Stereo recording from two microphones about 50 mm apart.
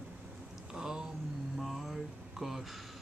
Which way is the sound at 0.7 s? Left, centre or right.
Centre.